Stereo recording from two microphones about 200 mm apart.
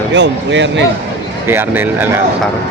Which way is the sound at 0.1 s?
65° right (ahead or behind).